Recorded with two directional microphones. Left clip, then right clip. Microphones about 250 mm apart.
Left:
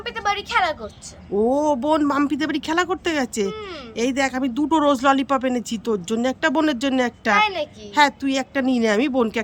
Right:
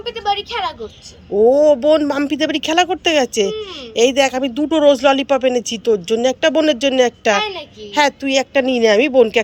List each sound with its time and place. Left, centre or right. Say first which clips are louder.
0.1 s speech: right 4 dB; centre
1.5 s speech: right 9 dB; centre